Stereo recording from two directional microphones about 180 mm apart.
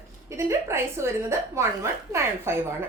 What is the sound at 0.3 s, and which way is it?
A woman's voice, 15° right (ahead or behind).